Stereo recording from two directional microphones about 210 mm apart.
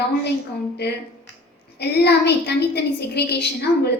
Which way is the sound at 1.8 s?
50° left (ahead or behind).